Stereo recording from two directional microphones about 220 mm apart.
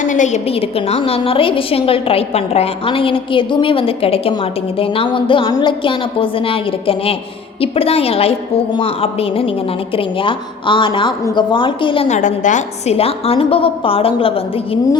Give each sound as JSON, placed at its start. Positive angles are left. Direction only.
{"t": 0.0, "sound": "a woman's voice", "side_deg": 35}